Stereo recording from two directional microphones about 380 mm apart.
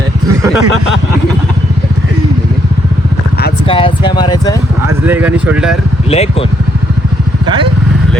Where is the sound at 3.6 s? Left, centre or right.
Centre.